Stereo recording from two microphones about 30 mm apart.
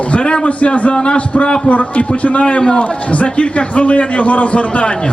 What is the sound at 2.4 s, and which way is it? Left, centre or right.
A man's voice, left.